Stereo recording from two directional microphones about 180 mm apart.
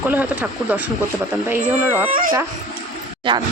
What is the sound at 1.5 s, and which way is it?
Speech, 10° right (ahead or behind).